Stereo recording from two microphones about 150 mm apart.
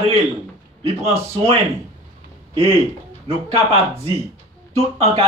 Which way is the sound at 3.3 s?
40° right (ahead or behind).